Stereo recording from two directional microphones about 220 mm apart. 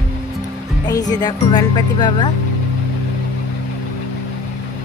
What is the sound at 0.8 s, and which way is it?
A woman's voice, 15° left (ahead or behind).